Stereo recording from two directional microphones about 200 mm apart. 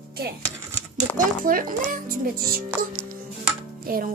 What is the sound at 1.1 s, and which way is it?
A child's voice, 45° right (ahead or behind).